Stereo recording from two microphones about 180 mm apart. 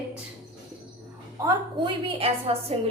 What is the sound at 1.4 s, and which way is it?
Speech, 20° right (ahead or behind).